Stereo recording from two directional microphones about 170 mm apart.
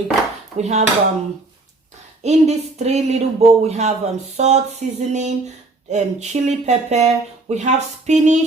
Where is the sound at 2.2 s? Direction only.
40° right (ahead or behind).